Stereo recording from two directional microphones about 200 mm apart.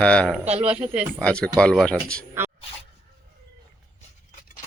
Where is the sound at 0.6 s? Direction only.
5° right (ahead or behind).